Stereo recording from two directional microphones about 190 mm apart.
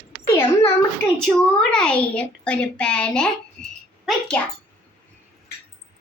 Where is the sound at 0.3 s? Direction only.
15° left (ahead or behind).